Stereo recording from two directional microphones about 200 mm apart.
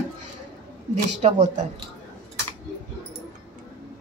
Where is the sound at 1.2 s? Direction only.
30° right (ahead or behind).